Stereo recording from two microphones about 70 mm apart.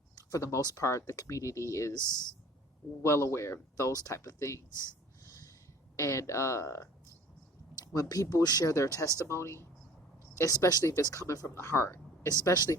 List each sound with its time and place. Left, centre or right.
0.2 s speech: left
3.0 s speech: left
4.8 s snort: left
6.0 s speech: left
7.9 s speech: left
9.2 s speech: left
11.0 s speech: left
12.3 s speech: left